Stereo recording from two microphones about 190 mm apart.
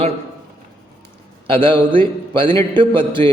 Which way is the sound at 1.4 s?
30° right (ahead or behind).